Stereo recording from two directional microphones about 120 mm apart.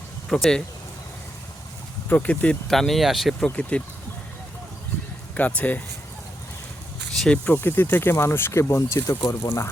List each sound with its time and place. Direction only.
0.3 s speech: 5° left (ahead or behind)
2.0 s speech: 15° left (ahead or behind)
3.5 s speech: 10° left (ahead or behind)
5.3 s speech: 10° left (ahead or behind)
7.2 s speech: 10° left (ahead or behind)